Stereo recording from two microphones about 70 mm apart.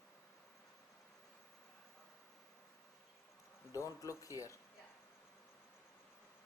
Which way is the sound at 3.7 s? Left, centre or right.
Left.